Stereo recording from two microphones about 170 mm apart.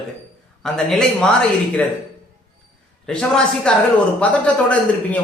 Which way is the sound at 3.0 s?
5° left (ahead or behind).